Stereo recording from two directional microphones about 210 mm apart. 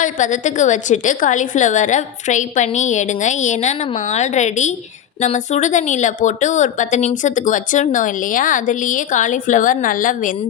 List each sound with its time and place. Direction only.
0.0 s a woman's voice: 35° left (ahead or behind)